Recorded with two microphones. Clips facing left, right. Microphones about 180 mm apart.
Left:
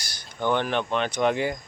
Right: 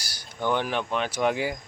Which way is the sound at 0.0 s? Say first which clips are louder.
Left 1 dB; 10° right (ahead or behind).